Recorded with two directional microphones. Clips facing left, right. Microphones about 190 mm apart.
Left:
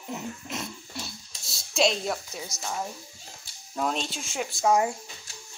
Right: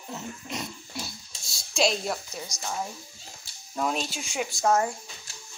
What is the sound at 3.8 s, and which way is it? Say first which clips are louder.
Speech: even; 5° right (ahead or behind).